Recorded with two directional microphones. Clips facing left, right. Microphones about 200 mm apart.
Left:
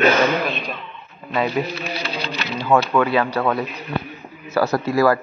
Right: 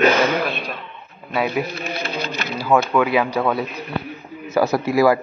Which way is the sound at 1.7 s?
50° right (ahead or behind).